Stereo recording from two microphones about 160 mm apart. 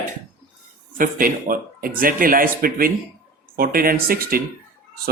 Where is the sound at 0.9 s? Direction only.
60° right (ahead or behind).